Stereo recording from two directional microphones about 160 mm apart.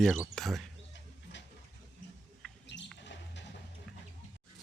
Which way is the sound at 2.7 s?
90° left.